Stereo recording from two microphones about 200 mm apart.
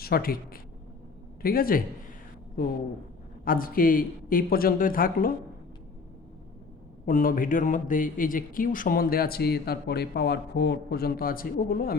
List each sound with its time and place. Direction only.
0.0 s a man's voice: 50° left (ahead or behind)
3.4 s speech: 45° left (ahead or behind)
7.0 s speech: 45° left (ahead or behind)